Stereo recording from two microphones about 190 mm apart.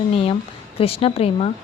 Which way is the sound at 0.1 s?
30° left (ahead or behind).